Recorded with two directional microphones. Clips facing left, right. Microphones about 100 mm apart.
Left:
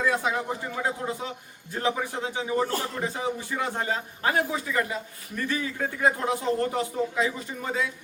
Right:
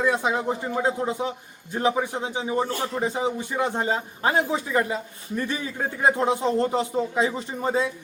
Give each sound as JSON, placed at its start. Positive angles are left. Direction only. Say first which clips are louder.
{"t": 0.0, "sound": "speech", "louder": "right 3 dB", "side_deg": -20}